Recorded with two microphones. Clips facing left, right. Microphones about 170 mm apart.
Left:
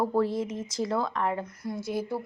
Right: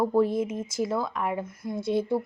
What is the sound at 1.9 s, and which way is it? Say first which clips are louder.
Speech: right 6 dB; 25° right (ahead or behind).